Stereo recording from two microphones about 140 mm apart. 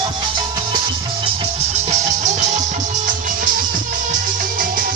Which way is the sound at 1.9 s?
55° right (ahead or behind).